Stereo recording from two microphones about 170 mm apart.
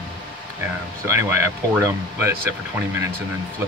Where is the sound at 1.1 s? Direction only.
15° right (ahead or behind).